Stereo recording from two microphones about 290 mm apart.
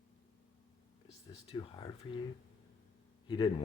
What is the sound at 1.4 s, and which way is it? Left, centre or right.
Speech, centre.